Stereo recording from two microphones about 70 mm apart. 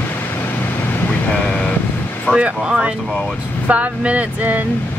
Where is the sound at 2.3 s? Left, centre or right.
Centre.